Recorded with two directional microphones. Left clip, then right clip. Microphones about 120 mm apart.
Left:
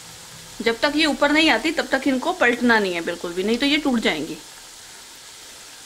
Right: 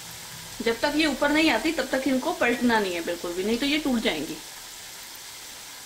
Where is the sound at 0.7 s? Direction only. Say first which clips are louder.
Left 4 dB; 40° left (ahead or behind).